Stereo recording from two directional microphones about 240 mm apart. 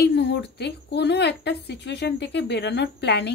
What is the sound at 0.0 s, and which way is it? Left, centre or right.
Speech, left.